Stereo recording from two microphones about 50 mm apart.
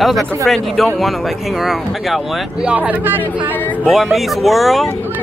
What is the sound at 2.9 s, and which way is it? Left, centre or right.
Speech, right.